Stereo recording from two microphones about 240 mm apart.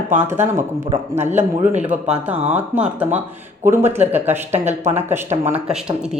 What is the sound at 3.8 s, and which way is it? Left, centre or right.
Speech, right.